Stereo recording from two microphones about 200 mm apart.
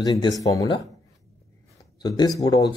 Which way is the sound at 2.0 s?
20° left (ahead or behind).